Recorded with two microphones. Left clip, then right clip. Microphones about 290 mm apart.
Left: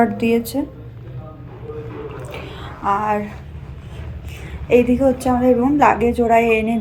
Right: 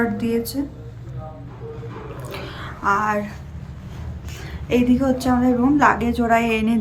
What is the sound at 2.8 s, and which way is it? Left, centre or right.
Speech, centre.